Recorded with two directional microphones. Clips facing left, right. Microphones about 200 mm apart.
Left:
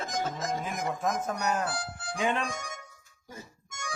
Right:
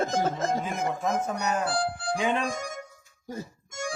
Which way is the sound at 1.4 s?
Centre (ahead or behind).